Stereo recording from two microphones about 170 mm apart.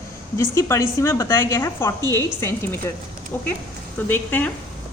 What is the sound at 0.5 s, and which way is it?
A woman's voice, 15° left (ahead or behind).